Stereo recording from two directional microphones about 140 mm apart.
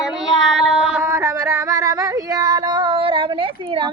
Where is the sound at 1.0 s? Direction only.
20° right (ahead or behind).